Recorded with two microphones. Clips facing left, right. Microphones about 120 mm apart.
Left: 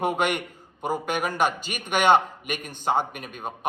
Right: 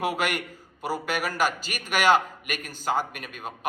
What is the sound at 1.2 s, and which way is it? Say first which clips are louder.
A man's voice: left 2 dB; 20° left (ahead or behind).